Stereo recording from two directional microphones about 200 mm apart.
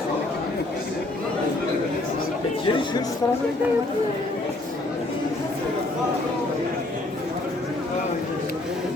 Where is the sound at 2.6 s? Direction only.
25° left (ahead or behind).